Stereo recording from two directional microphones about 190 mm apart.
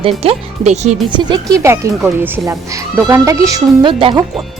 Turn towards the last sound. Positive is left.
turn(degrees=-25)  # may be behind; listen again after turning